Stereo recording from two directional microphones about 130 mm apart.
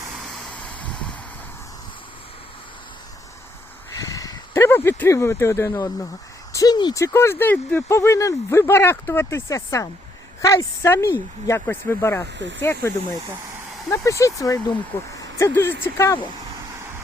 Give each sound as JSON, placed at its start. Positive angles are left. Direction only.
{"t": 0.5, "sound": "vehicle", "side_deg": 10}
{"t": 4.1, "sound": "speech", "side_deg": 25}
{"t": 7.0, "sound": "speech", "side_deg": 20}
{"t": 13.9, "sound": "speech", "side_deg": 25}